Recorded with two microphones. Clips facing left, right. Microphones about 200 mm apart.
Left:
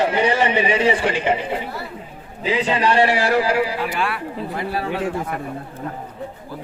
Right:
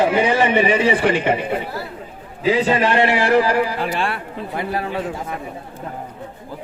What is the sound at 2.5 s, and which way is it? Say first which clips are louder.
A man's voice: right 2 dB; 45° right (ahead or behind).